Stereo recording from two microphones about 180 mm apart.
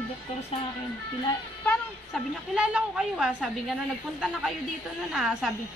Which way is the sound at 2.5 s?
5° right (ahead or behind).